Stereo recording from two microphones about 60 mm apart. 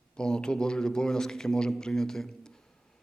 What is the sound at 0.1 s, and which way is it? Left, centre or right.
A man's voice, centre.